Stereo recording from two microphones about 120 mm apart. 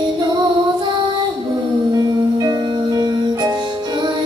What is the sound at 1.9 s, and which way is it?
Music, 35° right (ahead or behind).